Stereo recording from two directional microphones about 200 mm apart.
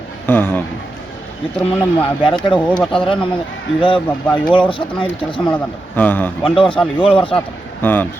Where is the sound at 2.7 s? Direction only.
20° left (ahead or behind).